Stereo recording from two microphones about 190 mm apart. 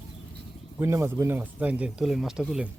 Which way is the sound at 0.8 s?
15° right (ahead or behind).